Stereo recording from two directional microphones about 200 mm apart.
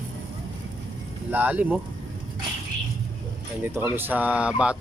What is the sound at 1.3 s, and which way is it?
Speech, 10° right (ahead or behind).